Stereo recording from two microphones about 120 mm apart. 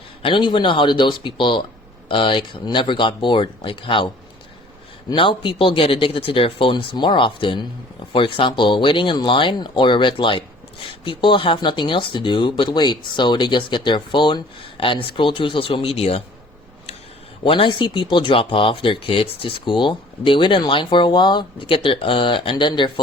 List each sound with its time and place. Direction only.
0.2 s speech: 45° left (ahead or behind)
5.1 s speech: 45° left (ahead or behind)
17.4 s speech: 45° left (ahead or behind)